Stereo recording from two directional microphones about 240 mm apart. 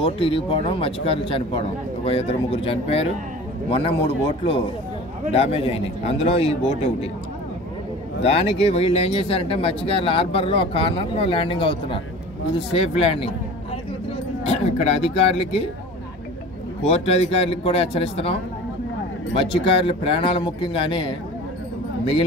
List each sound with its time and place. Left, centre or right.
0.0 s speech: left
8.2 s speech: left
14.4 s speech: left
16.8 s speech: left